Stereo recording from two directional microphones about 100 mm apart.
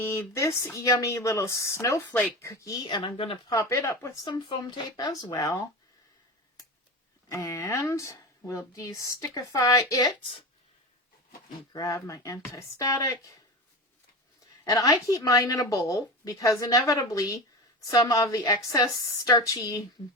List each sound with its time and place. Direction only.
0.0 s speech: 30° left (ahead or behind)
2.7 s speech: 45° left (ahead or behind)
3.5 s speech: 30° left (ahead or behind)
4.2 s speech: 50° left (ahead or behind)
4.9 s speech: 40° left (ahead or behind)
7.3 s speech: 30° left (ahead or behind)
11.7 s speech: 35° left (ahead or behind)
14.6 s speech: 40° left (ahead or behind)